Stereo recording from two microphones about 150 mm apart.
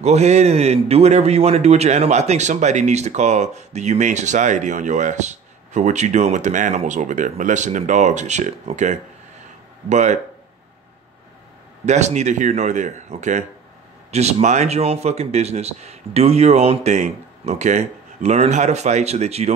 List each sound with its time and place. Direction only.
0.0 s a man's voice: 50° right (ahead or behind)
11.8 s a man's voice: 50° right (ahead or behind)